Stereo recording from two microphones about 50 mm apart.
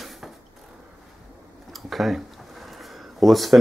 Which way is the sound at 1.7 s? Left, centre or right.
Centre.